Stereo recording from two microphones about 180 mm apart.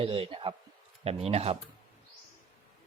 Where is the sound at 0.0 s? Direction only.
30° right (ahead or behind).